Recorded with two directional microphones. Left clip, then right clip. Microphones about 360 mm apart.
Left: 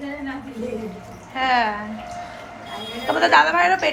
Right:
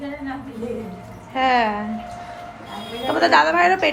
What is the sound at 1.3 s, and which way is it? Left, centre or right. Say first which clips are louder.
Speech: right 1 dB; centre.